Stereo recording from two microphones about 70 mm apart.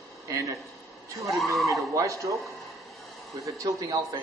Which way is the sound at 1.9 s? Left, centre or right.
Right.